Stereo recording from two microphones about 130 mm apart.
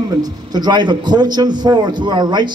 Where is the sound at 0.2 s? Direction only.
30° right (ahead or behind).